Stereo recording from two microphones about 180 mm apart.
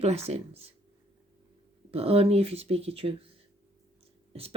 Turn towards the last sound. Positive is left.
turn(degrees=-35)  # may be behind; listen again after turning